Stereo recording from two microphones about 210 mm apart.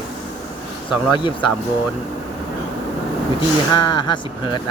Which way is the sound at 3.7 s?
20° left (ahead or behind).